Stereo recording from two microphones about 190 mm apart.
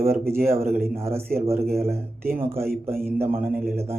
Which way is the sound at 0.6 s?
50° right (ahead or behind).